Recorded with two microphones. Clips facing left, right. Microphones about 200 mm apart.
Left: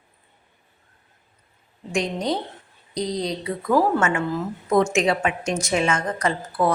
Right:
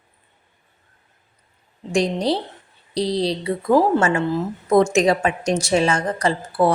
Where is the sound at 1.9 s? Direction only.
35° right (ahead or behind).